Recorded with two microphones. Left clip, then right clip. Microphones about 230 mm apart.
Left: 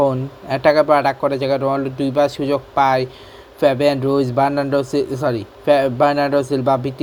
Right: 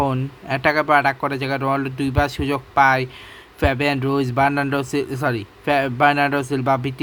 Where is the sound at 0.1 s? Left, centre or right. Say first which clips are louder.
Left 2 dB; centre.